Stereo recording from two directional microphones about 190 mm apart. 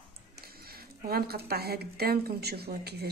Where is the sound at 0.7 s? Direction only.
50° right (ahead or behind).